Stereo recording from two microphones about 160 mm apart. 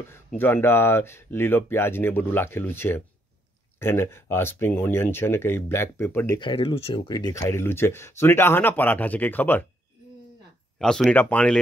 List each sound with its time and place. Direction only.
0.4 s speech: 15° left (ahead or behind)
6.4 s speech: 35° left (ahead or behind); by 9.7 s 10° left (ahead or behind)
10.8 s speech: 5° left (ahead or behind)